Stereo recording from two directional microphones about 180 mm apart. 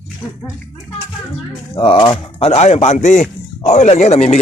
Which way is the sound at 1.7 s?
25° left (ahead or behind).